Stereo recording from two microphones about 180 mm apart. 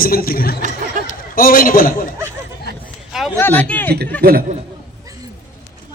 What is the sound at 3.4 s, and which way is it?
Speech, 10° left (ahead or behind).